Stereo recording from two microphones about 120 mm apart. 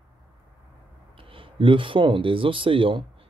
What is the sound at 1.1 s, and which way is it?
Speech, 45° right (ahead or behind).